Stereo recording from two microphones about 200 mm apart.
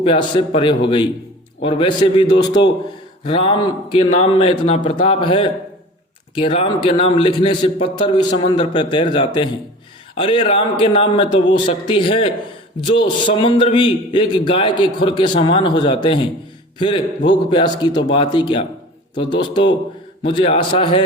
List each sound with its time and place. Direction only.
0.0 s a man's voice: 30° left (ahead or behind)